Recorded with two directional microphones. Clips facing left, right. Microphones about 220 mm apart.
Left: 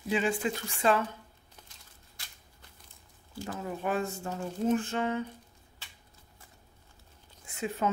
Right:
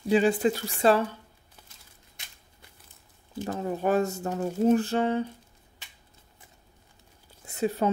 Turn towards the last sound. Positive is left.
turn(degrees=-35)  # may be behind; listen again after turning